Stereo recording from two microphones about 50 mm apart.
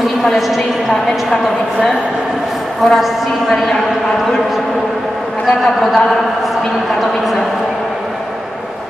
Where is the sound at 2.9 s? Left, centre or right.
Centre.